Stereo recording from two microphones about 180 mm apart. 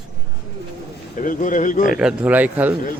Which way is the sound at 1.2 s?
45° left (ahead or behind).